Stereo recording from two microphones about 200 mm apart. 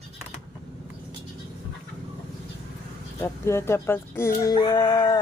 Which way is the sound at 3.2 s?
15° left (ahead or behind).